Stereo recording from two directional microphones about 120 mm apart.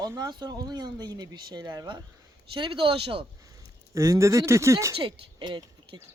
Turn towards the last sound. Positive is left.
turn(degrees=-40)  # may be behind; listen again after turning